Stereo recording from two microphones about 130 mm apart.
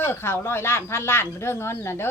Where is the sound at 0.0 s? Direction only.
20° left (ahead or behind).